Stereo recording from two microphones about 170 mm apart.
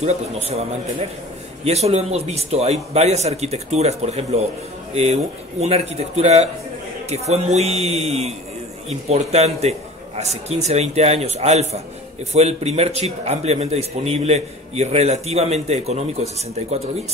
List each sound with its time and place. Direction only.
0.0 s a man's voice: 40° right (ahead or behind)